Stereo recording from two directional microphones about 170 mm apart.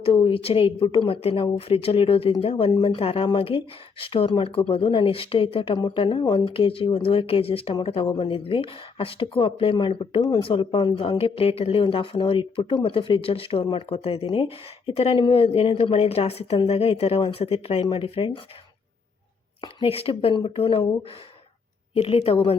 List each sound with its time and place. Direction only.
0.0 s speech: 35° left (ahead or behind)
19.6 s speech: 35° left (ahead or behind)
21.9 s speech: 35° left (ahead or behind)